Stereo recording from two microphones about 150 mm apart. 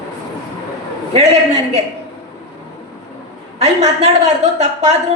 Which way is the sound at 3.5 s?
45° right (ahead or behind).